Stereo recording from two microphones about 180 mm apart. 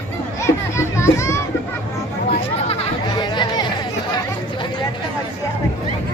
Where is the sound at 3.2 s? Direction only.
25° left (ahead or behind).